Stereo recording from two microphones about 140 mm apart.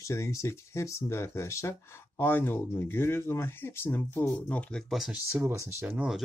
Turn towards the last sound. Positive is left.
turn(degrees=-5)  # may be behind; listen again after turning